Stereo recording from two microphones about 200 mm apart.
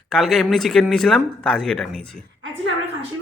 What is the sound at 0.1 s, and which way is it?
Speech, centre (ahead or behind).